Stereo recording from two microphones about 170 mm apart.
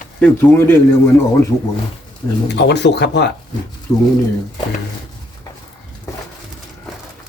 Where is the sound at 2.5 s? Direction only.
90° left.